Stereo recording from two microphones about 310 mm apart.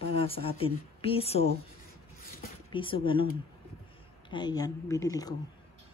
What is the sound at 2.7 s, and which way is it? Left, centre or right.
Speech, centre.